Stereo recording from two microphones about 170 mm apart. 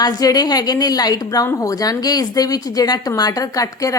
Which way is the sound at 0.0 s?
20° left (ahead or behind).